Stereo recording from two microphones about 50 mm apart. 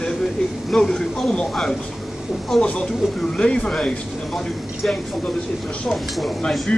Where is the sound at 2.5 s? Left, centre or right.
Centre.